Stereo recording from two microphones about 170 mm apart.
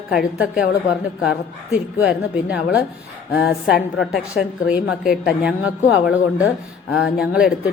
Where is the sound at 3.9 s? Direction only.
Centre (ahead or behind).